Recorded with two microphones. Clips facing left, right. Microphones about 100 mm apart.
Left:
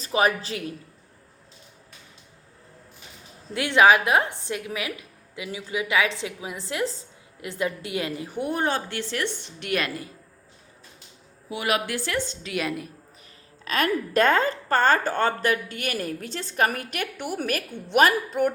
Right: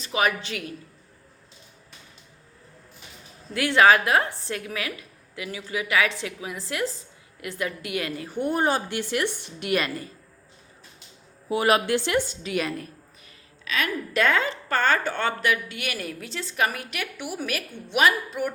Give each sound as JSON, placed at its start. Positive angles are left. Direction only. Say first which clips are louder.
{"t": 0.0, "sound": "speech", "louder": "left 2 dB", "side_deg": 30}
{"t": 3.5, "sound": "a woman's voice", "louder": "even", "side_deg": 20}
{"t": 8.4, "sound": "a woman's voice", "louder": "right 2 dB", "side_deg": 0}
{"t": 11.4, "sound": "speech", "louder": "right 5 dB", "side_deg": -40}
{"t": 11.9, "sound": "a woman's voice", "louder": "right 4 dB", "side_deg": -20}
{"t": 13.7, "sound": "a woman's voice", "louder": "left 4 dB", "side_deg": 50}